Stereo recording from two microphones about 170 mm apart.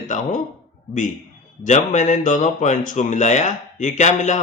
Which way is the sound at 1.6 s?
45° left (ahead or behind).